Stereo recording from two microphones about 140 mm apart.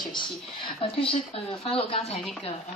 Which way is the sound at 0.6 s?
40° left (ahead or behind).